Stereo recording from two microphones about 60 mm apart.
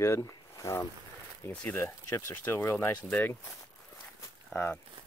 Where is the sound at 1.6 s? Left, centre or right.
Left.